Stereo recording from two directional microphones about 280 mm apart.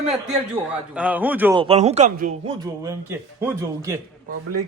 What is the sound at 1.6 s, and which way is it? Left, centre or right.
Speech, right.